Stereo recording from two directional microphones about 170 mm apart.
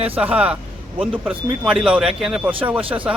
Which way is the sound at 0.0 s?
10° right (ahead or behind).